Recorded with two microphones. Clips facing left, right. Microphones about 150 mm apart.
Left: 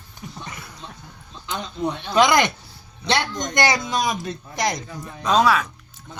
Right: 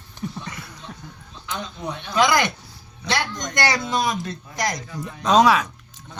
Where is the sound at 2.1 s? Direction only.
25° left (ahead or behind).